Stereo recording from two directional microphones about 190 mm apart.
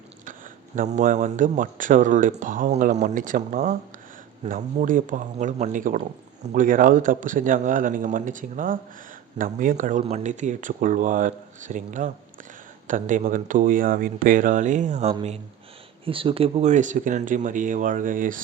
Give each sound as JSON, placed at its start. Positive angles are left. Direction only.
{"t": 0.8, "sound": "speech", "side_deg": -40}